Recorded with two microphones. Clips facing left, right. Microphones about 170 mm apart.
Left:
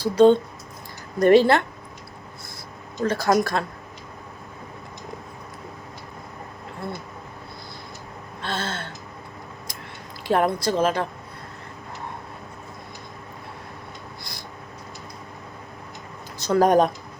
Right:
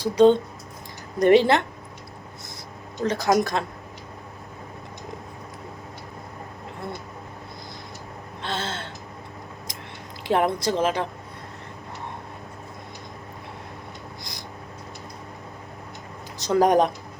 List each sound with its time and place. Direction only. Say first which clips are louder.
0.0 s speech: left 1 dB; 15° right (ahead or behind)
3.0 s speech: left 1 dB; 20° right (ahead or behind)
8.4 s gasp: left 1 dB; 20° right (ahead or behind)
10.2 s speech: left 1 dB; 20° right (ahead or behind)
16.4 s speech: left 1 dB; 15° right (ahead or behind)